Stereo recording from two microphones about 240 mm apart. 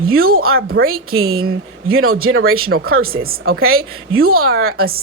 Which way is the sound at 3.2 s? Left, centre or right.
Right.